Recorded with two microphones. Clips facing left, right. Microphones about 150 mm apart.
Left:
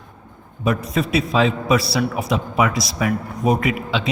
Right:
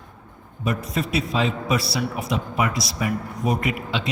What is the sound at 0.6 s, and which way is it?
A man's voice, 90° left.